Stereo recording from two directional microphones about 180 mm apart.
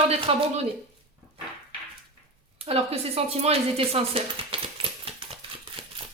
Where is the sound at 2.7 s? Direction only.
35° right (ahead or behind).